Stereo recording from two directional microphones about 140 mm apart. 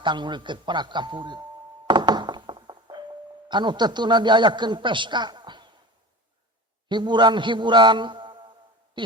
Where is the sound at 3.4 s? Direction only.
35° right (ahead or behind).